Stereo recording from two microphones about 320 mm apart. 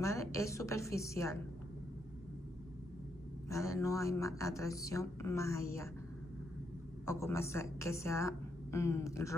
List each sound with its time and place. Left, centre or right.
0.0 s a woman's voice: centre
3.4 s a woman's voice: centre
7.1 s a woman's voice: centre